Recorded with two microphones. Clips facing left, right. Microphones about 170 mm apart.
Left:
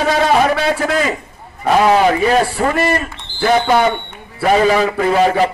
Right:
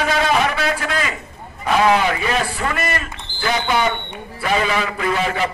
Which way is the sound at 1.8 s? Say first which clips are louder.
Left 4 dB; 35° left (ahead or behind).